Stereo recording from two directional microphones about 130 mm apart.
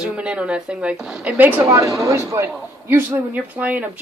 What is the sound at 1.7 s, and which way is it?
A man's voice, 25° right (ahead or behind).